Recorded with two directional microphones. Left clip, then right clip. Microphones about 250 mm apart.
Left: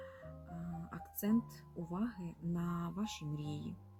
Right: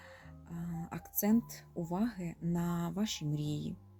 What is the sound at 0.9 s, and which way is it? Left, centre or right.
Music, right.